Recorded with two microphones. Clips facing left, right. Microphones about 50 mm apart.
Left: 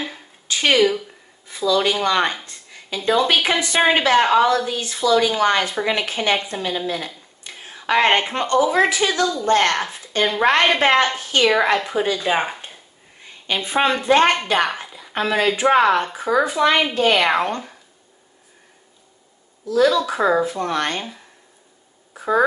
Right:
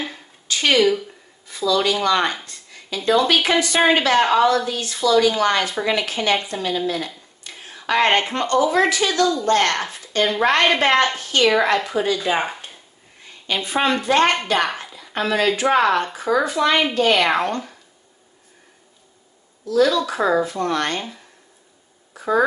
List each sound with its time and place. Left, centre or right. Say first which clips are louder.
0.5 s speech: even; centre
1.7 s a woman's voice: even; centre
2.4 s a sound: even; left
3.4 s a woman's voice: right 1 dB; left
7.5 s a sound: left 1 dB; centre
8.5 s a woman's voice: left 1 dB; centre
12.2 s speech: left 1 dB; centre
13.5 s a woman's voice: left 1 dB; left
19.7 s speech: left 1 dB; centre
22.1 s a sound: even; centre